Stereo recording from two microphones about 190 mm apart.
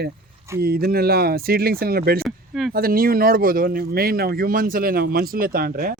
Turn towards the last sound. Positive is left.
turn(degrees=-50)  # may be behind; listen again after turning